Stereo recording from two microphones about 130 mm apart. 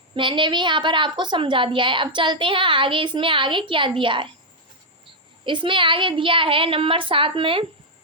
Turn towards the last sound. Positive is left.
turn(degrees=-45)  # may be behind; listen again after turning